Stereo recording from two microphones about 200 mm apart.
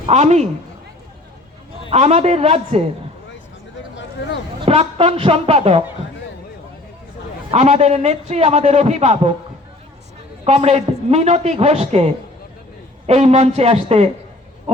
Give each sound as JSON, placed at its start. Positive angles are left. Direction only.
{"t": 0.0, "sound": "a man's voice", "side_deg": -35}
{"t": 1.9, "sound": "a man's voice", "side_deg": -30}
{"t": 4.6, "sound": "a woman's voice", "side_deg": -30}
{"t": 7.5, "sound": "a man's voice", "side_deg": -35}
{"t": 10.4, "sound": "a man's voice", "side_deg": -30}